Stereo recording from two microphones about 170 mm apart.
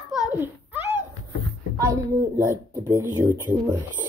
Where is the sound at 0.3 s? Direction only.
10° right (ahead or behind).